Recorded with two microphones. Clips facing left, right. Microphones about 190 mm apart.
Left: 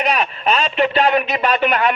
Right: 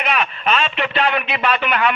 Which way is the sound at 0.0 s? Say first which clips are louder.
Left 2 dB; 40° left (ahead or behind).